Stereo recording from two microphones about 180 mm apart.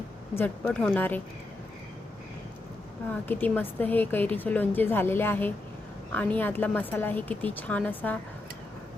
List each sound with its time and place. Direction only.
0.3 s a woman's voice: 10° left (ahead or behind)
3.1 s a woman's voice: 10° left (ahead or behind)